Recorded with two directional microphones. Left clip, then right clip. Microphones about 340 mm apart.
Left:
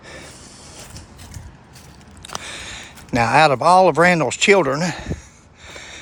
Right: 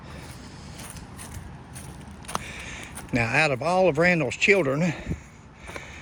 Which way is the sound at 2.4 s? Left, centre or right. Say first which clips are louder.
Left 5 dB; centre.